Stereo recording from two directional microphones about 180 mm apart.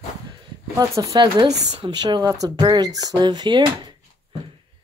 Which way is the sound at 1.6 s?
40° right (ahead or behind).